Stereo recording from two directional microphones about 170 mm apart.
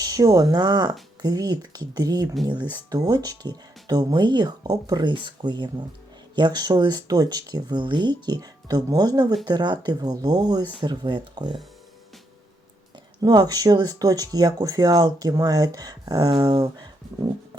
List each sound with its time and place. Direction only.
0.0 s speech: 20° right (ahead or behind)
13.2 s speech: 25° right (ahead or behind)